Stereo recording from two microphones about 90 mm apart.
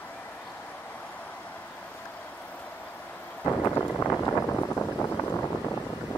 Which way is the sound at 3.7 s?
25° left (ahead or behind).